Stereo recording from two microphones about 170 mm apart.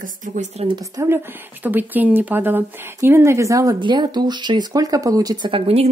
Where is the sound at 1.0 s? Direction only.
10° right (ahead or behind).